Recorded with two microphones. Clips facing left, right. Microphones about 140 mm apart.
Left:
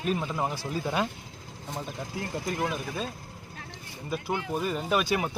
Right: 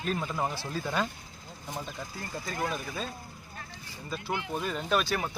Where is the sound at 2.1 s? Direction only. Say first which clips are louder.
Left 5 dB; 75° left (ahead or behind).